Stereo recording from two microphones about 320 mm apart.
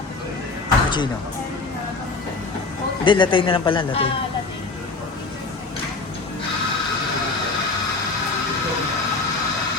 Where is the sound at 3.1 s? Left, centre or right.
Centre.